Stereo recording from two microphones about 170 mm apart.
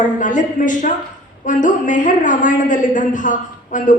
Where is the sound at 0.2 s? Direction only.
50° left (ahead or behind).